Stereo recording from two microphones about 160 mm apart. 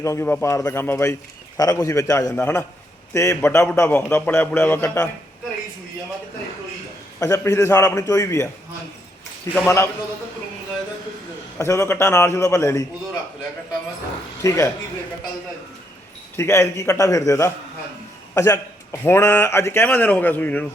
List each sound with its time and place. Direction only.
0.0 s a man's voice: 15° left (ahead or behind)
7.2 s a man's voice: 20° left (ahead or behind)
9.6 s a man's voice: 15° left (ahead or behind)
11.5 s a man's voice: 15° left (ahead or behind)
14.4 s a man's voice: 20° left (ahead or behind)
16.3 s a man's voice: 15° left (ahead or behind)